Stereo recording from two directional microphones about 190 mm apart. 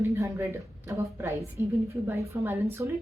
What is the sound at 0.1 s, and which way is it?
A woman's voice, 15° right (ahead or behind).